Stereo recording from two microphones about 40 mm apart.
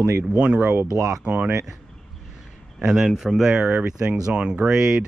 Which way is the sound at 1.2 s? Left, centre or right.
Right.